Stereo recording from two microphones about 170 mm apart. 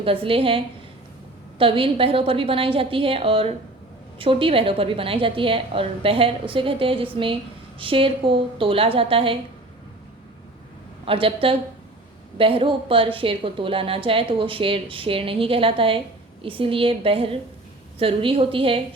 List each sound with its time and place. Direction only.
0.0 s a woman's voice: 30° right (ahead or behind)
11.0 s a woman's voice: 30° right (ahead or behind)